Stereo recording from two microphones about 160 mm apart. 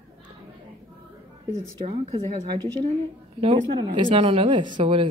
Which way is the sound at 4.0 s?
35° right (ahead or behind).